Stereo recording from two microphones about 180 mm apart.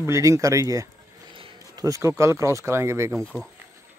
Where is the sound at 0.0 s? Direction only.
15° right (ahead or behind).